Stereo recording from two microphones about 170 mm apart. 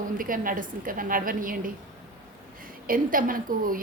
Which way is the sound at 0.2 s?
55° right (ahead or behind).